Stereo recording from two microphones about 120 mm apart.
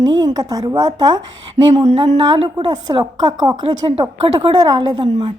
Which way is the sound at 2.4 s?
45° right (ahead or behind).